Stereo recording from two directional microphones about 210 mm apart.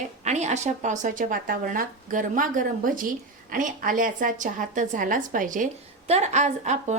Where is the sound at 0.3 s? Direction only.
35° right (ahead or behind).